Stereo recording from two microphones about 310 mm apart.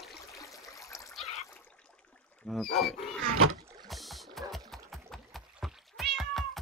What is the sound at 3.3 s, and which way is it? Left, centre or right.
Rowboat, right.